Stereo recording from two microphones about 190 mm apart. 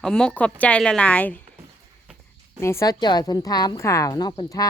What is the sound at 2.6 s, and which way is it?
A woman's voice, 15° left (ahead or behind).